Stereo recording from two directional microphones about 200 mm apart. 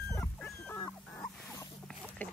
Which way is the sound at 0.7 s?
15° left (ahead or behind).